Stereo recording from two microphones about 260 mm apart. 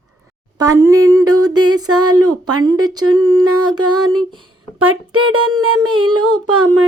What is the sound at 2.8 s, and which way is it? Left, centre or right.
Humming, centre.